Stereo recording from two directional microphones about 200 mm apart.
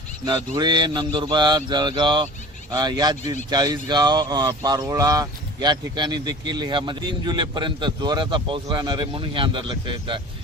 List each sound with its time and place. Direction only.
0.5 s speech: 20° right (ahead or behind)